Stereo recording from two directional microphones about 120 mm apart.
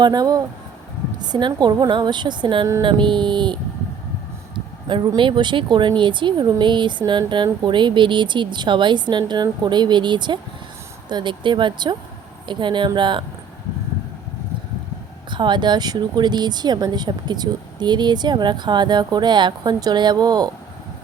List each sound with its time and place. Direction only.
0.0 s speech: 35° right (ahead or behind)
4.9 s speech: 40° right (ahead or behind)
15.3 s speech: 40° right (ahead or behind)